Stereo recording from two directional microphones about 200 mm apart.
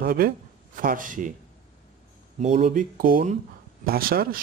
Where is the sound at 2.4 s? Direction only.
35° right (ahead or behind).